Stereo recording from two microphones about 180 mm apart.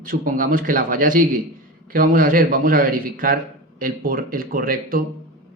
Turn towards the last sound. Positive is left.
turn(degrees=-55)  # may be behind; listen again after turning